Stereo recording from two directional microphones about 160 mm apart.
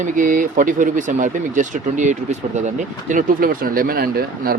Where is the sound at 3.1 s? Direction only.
60° right (ahead or behind).